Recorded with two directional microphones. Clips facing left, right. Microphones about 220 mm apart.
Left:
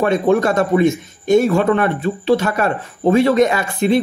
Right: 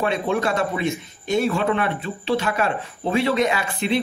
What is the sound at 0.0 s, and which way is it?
A man's voice, 45° left (ahead or behind).